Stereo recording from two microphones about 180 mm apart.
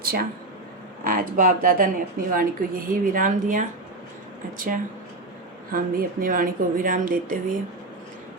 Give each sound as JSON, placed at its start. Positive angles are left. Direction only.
{"t": 0.0, "sound": "speech", "side_deg": -55}